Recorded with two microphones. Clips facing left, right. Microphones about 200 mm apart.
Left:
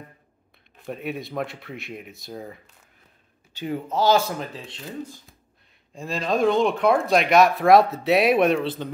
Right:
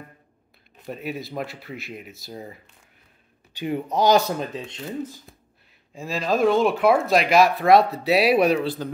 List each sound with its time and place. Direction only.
0.8 s speech: centre (ahead or behind)
3.5 s speech: 15° right (ahead or behind)
5.9 s speech: centre (ahead or behind)